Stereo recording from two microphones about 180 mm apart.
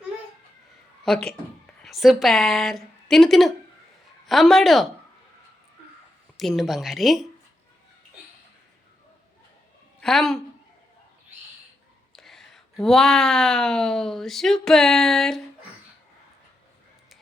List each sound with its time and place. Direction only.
1.0 s a woman's voice: centre (ahead or behind)
6.3 s speech: centre (ahead or behind)
10.0 s a woman's voice: centre (ahead or behind)
12.1 s speech: centre (ahead or behind)